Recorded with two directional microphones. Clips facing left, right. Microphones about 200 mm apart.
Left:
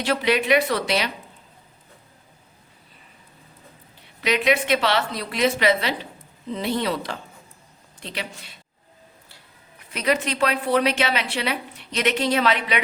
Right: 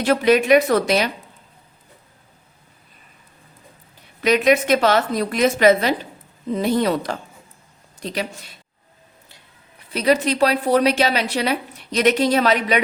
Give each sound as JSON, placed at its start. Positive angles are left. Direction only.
{"t": 0.0, "sound": "a woman's voice", "side_deg": -45}
{"t": 4.2, "sound": "a woman's voice", "side_deg": -45}
{"t": 9.9, "sound": "a woman's voice", "side_deg": -35}